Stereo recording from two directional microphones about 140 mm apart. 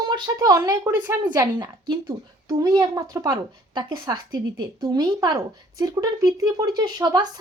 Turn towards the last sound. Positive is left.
turn(degrees=-30)  # may be behind; listen again after turning